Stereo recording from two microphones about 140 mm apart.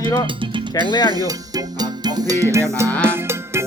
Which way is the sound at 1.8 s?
30° right (ahead or behind).